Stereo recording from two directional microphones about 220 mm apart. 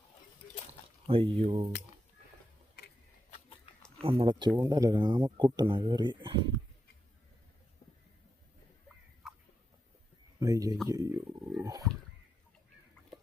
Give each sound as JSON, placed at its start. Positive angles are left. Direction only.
{"t": 0.7, "sound": "speech", "side_deg": -25}
{"t": 2.8, "sound": "tick-tock", "side_deg": 50}
{"t": 4.0, "sound": "speech", "side_deg": -25}
{"t": 10.4, "sound": "speech", "side_deg": -15}